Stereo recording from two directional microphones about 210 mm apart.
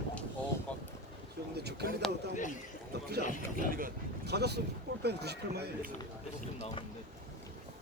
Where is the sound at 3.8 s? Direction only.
50° right (ahead or behind).